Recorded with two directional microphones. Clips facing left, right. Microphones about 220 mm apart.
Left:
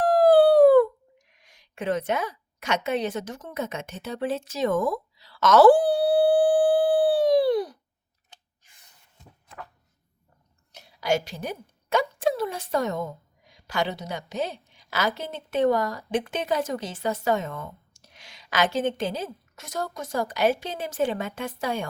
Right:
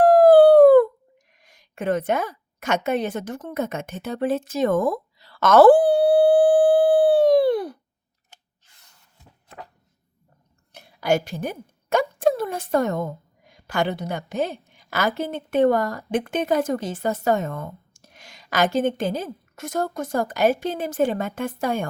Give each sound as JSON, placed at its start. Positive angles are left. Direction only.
{"t": 0.0, "sound": "dog", "side_deg": -55}
{"t": 1.3, "sound": "a sound", "side_deg": -45}
{"t": 10.7, "sound": "a woman's voice", "side_deg": -50}